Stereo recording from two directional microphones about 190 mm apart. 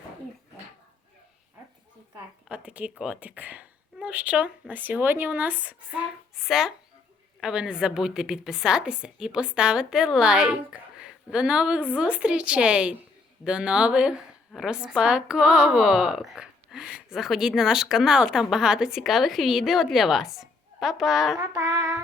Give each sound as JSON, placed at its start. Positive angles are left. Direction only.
{"t": 2.1, "sound": "a woman's voice", "side_deg": -5}
{"t": 21.3, "sound": "child singing", "side_deg": -15}